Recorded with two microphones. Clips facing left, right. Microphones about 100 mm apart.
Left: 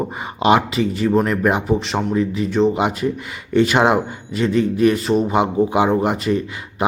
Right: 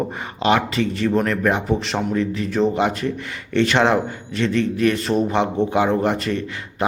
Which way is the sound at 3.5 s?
10° left (ahead or behind).